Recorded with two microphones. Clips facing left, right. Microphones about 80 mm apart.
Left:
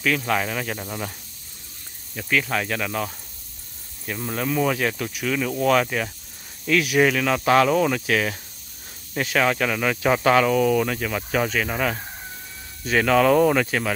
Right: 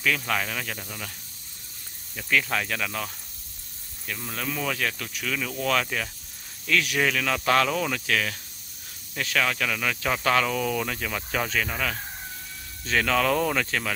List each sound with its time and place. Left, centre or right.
0.0 s speech: centre; by 1.1 s left
2.1 s speech: centre
4.1 s speech: centre
11.7 s speech: left
12.8 s speech: centre